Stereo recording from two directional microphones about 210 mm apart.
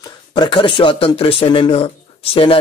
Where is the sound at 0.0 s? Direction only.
20° left (ahead or behind).